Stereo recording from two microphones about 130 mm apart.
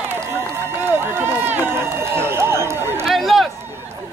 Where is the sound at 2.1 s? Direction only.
20° right (ahead or behind).